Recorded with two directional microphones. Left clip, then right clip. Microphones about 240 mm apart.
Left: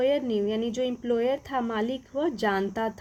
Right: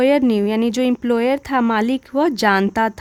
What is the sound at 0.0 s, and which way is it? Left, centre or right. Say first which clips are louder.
A woman's voice: right 9 dB; right.